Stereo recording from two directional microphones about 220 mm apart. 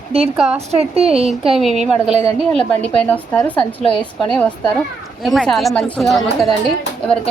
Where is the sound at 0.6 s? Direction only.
30° right (ahead or behind).